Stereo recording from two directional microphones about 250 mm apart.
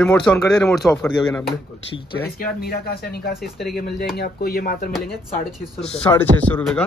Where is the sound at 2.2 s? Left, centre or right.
Left.